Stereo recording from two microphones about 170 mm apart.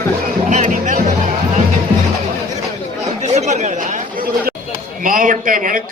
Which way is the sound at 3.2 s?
40° right (ahead or behind).